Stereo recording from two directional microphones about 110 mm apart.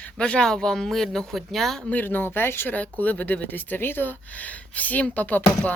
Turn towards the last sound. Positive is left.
turn(degrees=15)  # may be behind; listen again after turning